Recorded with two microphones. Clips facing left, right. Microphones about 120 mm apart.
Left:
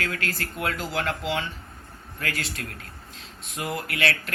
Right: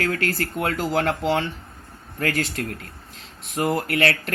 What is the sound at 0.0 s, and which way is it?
Speech, 45° right (ahead or behind).